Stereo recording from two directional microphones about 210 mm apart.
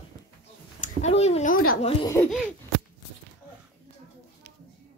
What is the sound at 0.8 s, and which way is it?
Speech, 30° left (ahead or behind).